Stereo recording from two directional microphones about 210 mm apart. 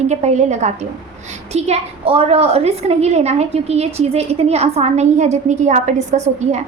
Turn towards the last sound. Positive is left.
turn(degrees=-35)  # may be behind; listen again after turning